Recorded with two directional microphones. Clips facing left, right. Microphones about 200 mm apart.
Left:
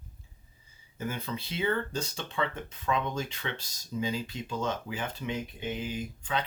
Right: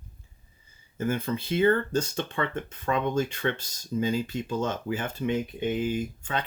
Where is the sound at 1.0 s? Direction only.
50° right (ahead or behind).